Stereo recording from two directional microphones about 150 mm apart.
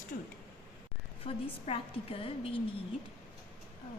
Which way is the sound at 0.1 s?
70° left (ahead or behind).